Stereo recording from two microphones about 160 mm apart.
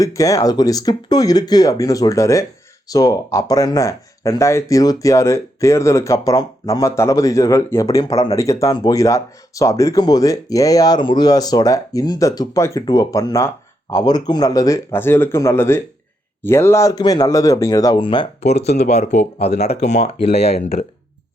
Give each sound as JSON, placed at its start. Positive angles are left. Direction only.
{"t": 0.0, "sound": "speech", "side_deg": 20}
{"t": 18.4, "sound": "speech", "side_deg": 40}